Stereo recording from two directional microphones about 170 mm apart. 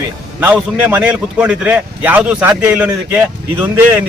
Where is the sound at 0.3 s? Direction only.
10° right (ahead or behind).